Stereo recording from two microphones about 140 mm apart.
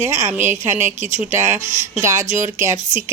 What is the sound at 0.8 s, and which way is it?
Speech, 60° right (ahead or behind).